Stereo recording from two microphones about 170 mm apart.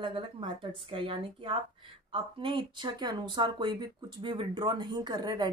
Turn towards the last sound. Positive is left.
turn(degrees=-25)  # may be behind; listen again after turning